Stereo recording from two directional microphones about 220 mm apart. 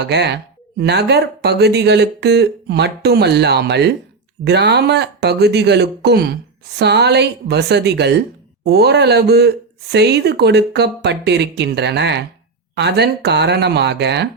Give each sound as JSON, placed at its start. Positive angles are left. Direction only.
{"t": 0.0, "sound": "speech", "side_deg": -50}